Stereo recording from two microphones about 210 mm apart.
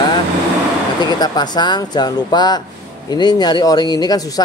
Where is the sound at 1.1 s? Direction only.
20° left (ahead or behind).